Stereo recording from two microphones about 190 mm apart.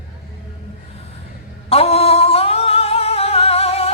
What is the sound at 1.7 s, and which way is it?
Music, 30° left (ahead or behind).